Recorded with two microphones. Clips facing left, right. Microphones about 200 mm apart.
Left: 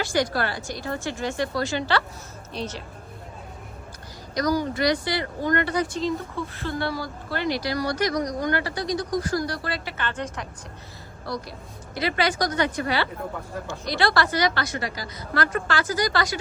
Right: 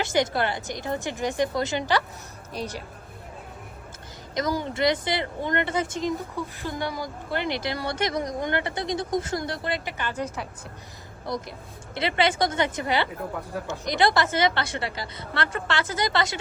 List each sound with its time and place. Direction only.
0.0 s a woman's voice: 20° right (ahead or behind)
4.4 s speech: 25° right (ahead or behind); by 10.4 s 5° right (ahead or behind)
11.3 s speech: 20° right (ahead or behind)